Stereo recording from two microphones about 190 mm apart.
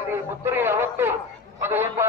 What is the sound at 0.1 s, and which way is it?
A man's voice, 10° right (ahead or behind).